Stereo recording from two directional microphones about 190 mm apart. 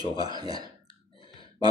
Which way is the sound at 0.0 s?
20° right (ahead or behind).